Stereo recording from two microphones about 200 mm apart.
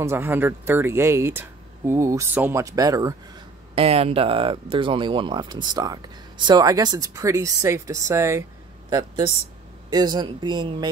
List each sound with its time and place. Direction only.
0.0 s speech: 10° right (ahead or behind)
3.7 s speech: 30° right (ahead or behind); by 8.5 s 15° right (ahead or behind)
9.8 s speech: 20° right (ahead or behind)